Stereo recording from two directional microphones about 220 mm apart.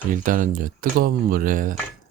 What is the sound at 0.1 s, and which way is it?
Speech, 40° right (ahead or behind).